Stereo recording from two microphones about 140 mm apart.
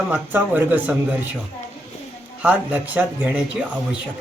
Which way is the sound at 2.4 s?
10° right (ahead or behind).